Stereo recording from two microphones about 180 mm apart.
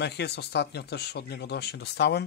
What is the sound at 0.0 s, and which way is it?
Speech, 70° left (ahead or behind).